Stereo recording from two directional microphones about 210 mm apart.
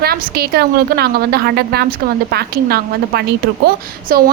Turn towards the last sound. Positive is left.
turn(degrees=-45)  # may be behind; listen again after turning